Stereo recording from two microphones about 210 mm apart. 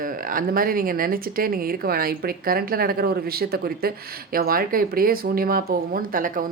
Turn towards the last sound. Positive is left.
turn(degrees=-40)  # may be behind; listen again after turning